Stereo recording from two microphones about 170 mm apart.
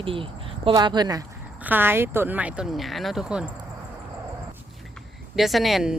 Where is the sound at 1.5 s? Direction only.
10° right (ahead or behind).